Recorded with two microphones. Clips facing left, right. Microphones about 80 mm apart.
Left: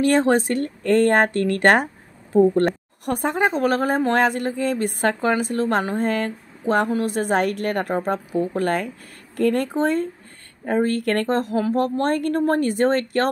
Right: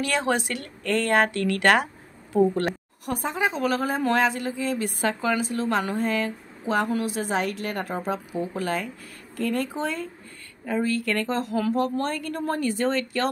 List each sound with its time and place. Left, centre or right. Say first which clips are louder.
0.0 s a woman's voice: left 7 dB; left